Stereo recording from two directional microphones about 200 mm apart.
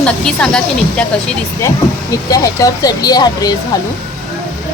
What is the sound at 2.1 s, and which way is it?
Speech, 15° left (ahead or behind).